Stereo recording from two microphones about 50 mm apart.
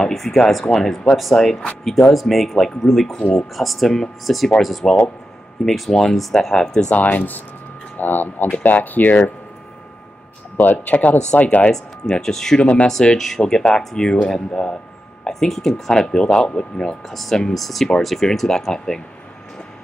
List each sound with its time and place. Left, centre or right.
0.0 s speech: centre
3.2 s speech: left
3.5 s speech: centre
4.8 s speech: centre
5.7 s speech: centre
6.9 s speech: left
10.6 s speech: left
11.7 s speech: centre
17.1 s speech: centre